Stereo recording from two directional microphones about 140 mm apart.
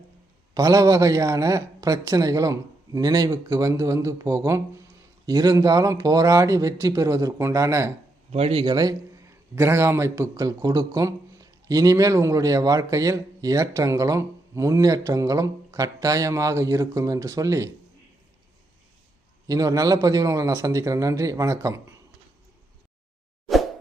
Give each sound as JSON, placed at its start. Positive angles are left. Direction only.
{"t": 0.5, "sound": "a man's voice", "side_deg": -25}
{"t": 8.3, "sound": "speech", "side_deg": -45}
{"t": 8.6, "sound": "a man's voice", "side_deg": -30}
{"t": 19.5, "sound": "a man's voice", "side_deg": -25}